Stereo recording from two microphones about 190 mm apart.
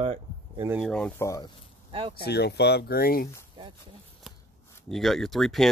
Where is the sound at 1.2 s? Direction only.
15° left (ahead or behind).